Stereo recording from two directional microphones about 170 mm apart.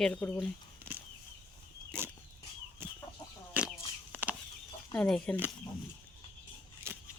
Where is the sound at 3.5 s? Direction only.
10° right (ahead or behind).